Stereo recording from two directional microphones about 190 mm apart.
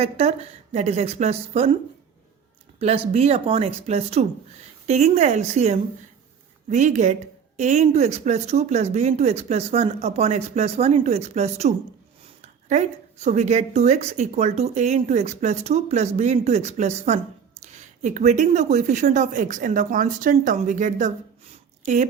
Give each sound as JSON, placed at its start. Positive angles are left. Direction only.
{"t": 0.0, "sound": "speech", "side_deg": -35}
{"t": 2.7, "sound": "speech", "side_deg": -30}